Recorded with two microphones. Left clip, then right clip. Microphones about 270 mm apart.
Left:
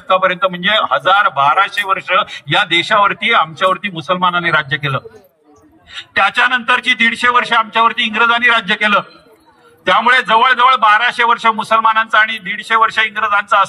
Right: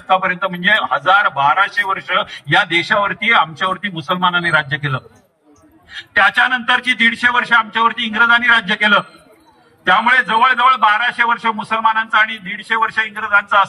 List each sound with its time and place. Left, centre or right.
0.1 s a man's voice: left
6.1 s a man's voice: left